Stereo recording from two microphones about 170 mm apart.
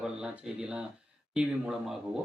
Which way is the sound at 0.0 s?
5° right (ahead or behind).